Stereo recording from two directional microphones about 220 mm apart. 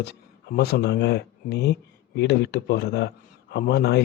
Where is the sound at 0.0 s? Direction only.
50° left (ahead or behind).